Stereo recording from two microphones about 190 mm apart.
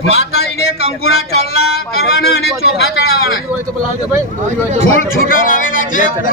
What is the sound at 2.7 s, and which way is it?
Speech, 55° left (ahead or behind).